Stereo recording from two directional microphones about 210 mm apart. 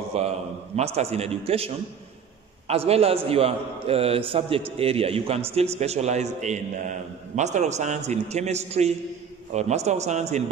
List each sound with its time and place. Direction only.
0.1 s a man's voice: 30° right (ahead or behind)
2.7 s a man's voice: 30° right (ahead or behind)